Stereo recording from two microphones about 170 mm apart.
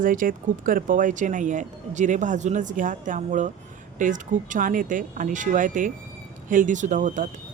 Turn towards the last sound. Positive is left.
turn(degrees=-50)  # may be behind; listen again after turning